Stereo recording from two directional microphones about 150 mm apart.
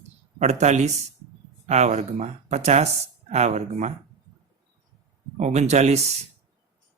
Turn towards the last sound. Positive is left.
turn(degrees=-50)  # may be behind; listen again after turning